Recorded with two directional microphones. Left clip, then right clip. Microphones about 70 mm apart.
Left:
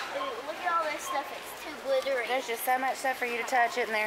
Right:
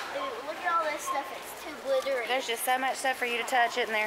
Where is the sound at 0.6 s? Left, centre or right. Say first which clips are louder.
Right 1 dB; centre.